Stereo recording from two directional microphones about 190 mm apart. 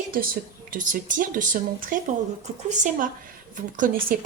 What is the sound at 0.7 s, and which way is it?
A woman's voice, 45° right (ahead or behind).